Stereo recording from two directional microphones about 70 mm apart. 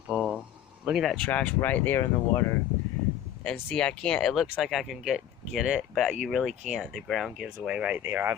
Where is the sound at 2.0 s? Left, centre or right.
Left.